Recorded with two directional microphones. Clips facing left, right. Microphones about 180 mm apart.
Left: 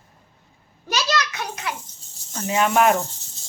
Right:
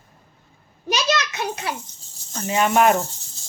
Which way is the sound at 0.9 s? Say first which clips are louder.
Right 2 dB; 20° right (ahead or behind).